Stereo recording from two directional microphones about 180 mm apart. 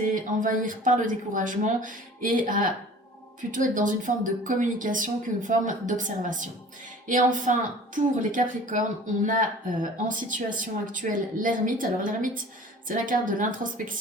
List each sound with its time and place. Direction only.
0.0 s speech: 50° right (ahead or behind)
9.8 s speech: 50° right (ahead or behind)